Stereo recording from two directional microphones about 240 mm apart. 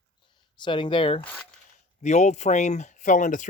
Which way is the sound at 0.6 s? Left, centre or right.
Centre.